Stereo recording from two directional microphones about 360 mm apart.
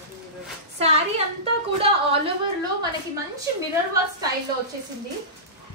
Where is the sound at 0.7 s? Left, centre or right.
Centre.